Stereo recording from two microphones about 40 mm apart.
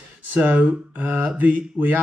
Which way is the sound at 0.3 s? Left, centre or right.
Right.